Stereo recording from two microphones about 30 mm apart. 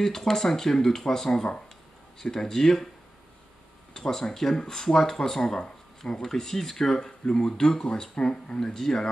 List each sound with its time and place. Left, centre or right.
0.0 s speech: centre
3.9 s speech: centre
7.2 s speech: left
7.8 s speech: left
8.5 s speech: centre